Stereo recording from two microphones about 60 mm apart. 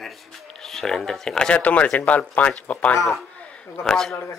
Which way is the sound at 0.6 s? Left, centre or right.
Centre.